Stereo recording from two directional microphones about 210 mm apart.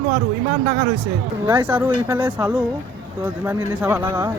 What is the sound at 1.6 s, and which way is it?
Speech, 10° right (ahead or behind).